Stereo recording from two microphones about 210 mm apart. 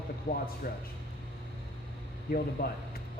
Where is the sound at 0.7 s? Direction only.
50° left (ahead or behind).